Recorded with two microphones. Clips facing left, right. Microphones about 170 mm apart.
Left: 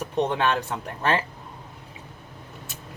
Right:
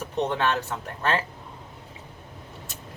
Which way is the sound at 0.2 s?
10° left (ahead or behind).